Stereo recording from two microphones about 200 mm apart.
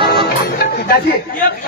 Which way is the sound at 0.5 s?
50° left (ahead or behind).